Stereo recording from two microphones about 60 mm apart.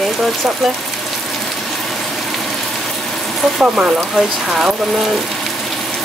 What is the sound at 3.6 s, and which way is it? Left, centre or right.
Speech, centre.